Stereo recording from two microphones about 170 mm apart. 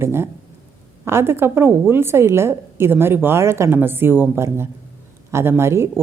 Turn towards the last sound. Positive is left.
turn(degrees=-15)  # may be behind; listen again after turning